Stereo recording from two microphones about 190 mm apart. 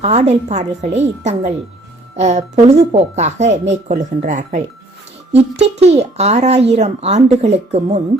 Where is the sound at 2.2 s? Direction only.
35° right (ahead or behind).